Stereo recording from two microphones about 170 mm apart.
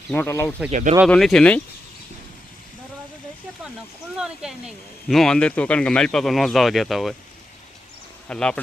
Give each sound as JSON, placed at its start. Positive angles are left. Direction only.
{"t": 0.1, "sound": "speech", "side_deg": 10}
{"t": 0.7, "sound": "speech", "side_deg": -45}
{"t": 1.0, "sound": "speech", "side_deg": 0}
{"t": 4.2, "sound": "speech", "side_deg": -5}
{"t": 8.3, "sound": "speech", "side_deg": 5}